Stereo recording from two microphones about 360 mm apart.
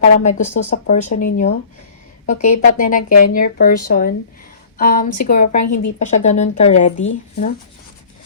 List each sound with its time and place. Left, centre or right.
0.2 s speech: centre